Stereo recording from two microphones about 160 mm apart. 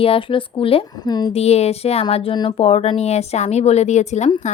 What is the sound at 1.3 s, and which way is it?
A woman's voice, 40° left (ahead or behind).